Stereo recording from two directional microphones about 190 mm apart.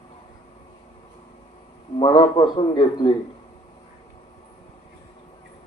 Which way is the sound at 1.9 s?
25° left (ahead or behind).